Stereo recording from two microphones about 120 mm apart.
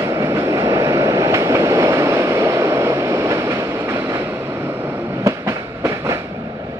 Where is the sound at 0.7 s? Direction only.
30° right (ahead or behind).